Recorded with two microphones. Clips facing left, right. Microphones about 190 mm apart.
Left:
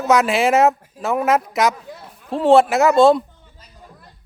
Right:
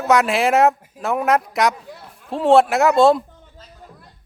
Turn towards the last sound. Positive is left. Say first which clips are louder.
# left 1 dB
turn(degrees=0)  # may be behind; listen again after turning